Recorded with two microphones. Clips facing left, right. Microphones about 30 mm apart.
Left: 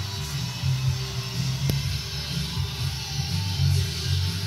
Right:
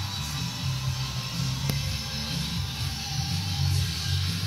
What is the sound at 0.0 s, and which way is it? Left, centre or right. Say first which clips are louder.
Music: even; right.